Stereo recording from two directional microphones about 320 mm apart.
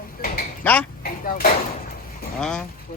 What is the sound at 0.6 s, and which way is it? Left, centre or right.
Speech, centre.